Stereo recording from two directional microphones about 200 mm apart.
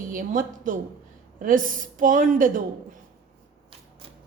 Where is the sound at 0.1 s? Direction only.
40° right (ahead or behind).